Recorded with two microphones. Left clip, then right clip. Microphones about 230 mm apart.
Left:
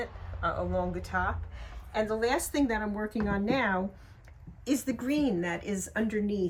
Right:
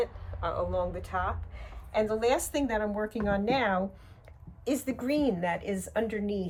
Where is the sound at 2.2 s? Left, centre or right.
Right.